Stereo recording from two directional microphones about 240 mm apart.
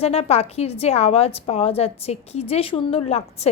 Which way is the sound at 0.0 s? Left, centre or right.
Left.